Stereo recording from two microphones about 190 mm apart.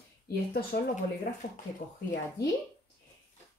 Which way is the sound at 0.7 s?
55° left (ahead or behind).